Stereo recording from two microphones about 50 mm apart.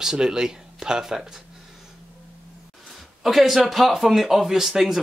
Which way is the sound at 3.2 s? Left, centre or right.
Centre.